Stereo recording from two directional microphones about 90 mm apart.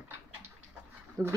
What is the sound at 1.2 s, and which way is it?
Speech, 45° right (ahead or behind).